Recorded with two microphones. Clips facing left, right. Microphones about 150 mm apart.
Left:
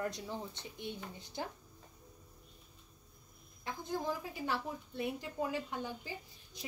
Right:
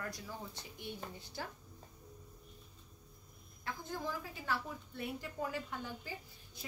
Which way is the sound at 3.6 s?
20° left (ahead or behind).